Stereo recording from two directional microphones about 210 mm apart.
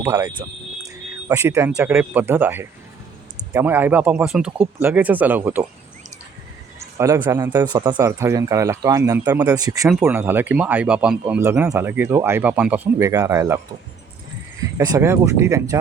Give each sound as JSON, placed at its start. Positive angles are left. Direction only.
{"t": 0.0, "sound": "speech", "side_deg": -20}
{"t": 7.0, "sound": "speech", "side_deg": -15}
{"t": 14.8, "sound": "speech", "side_deg": -15}